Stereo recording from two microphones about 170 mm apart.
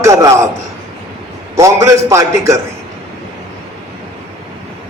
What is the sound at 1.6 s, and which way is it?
A man's voice, 20° right (ahead or behind).